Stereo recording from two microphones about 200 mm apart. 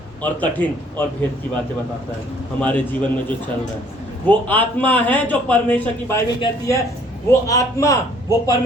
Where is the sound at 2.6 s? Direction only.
5° left (ahead or behind).